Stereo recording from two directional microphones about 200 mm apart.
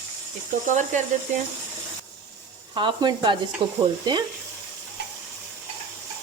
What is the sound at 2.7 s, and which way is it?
Speech, 25° right (ahead or behind).